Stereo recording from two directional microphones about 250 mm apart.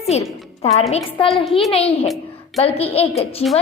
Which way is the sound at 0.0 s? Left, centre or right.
Left.